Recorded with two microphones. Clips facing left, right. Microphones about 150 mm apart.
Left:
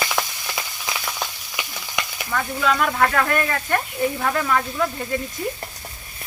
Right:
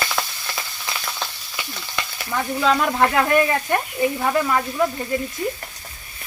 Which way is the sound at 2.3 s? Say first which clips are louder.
Right 2 dB; 25° right (ahead or behind).